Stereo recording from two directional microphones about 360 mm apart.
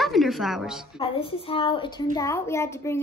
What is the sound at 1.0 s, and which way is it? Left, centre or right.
A woman's voice, centre.